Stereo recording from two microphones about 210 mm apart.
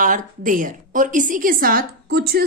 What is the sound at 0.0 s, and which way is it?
A woman's voice, 40° right (ahead or behind).